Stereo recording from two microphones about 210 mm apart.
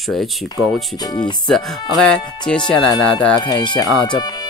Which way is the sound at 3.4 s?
20° left (ahead or behind).